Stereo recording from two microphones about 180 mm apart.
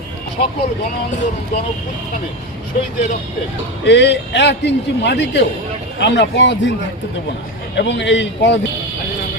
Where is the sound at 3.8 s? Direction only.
75° left (ahead or behind).